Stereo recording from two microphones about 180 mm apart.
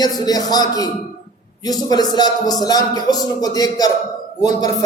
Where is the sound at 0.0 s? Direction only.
20° left (ahead or behind).